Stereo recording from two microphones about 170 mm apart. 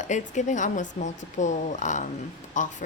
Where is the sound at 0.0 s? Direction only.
45° left (ahead or behind).